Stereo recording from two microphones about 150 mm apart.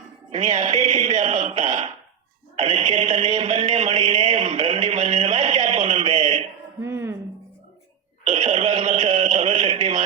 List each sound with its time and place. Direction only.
0.3 s a man's voice: 50° right (ahead or behind)
2.6 s a man's voice: 45° right (ahead or behind)
6.8 s music: 15° right (ahead or behind)
8.3 s a sound: 50° right (ahead or behind)
9.0 s music: 45° right (ahead or behind)